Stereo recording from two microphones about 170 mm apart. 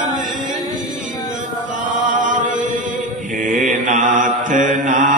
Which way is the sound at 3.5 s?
50° right (ahead or behind).